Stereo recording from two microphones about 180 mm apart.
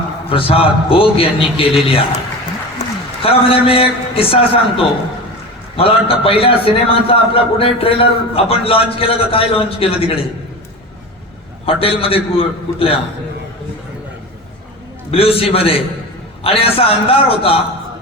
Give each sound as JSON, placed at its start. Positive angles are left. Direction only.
{"t": 0.3, "sound": "a man's voice", "side_deg": 30}
{"t": 3.2, "sound": "a man's voice", "side_deg": 30}
{"t": 11.6, "sound": "a man's voice", "side_deg": 30}
{"t": 15.1, "sound": "a man's voice", "side_deg": 30}